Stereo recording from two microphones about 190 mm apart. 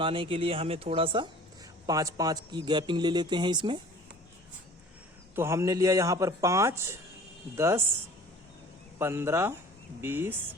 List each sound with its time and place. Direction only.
0.0 s speech: 25° right (ahead or behind)
5.3 s speech: 15° right (ahead or behind)
9.0 s speech: 15° right (ahead or behind)